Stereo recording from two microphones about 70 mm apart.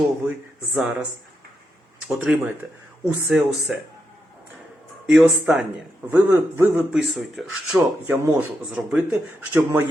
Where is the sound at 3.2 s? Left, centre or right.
Centre.